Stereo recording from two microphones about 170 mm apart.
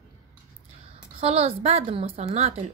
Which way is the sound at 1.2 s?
35° right (ahead or behind).